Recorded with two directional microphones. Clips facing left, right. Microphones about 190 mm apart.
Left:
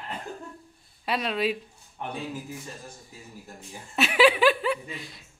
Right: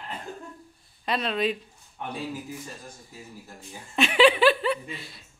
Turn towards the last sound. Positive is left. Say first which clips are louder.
# right 1 dB
turn(degrees=10)  # may be behind; listen again after turning